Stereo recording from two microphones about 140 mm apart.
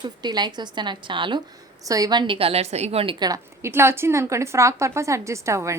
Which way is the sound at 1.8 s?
25° right (ahead or behind).